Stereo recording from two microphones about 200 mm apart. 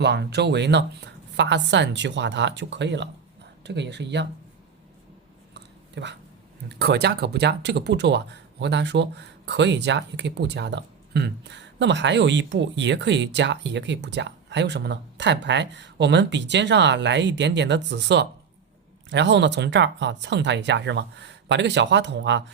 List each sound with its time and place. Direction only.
0.0 s speech: 55° right (ahead or behind)
5.5 s a sound: 60° right (ahead or behind)
6.7 s speech: 55° right (ahead or behind)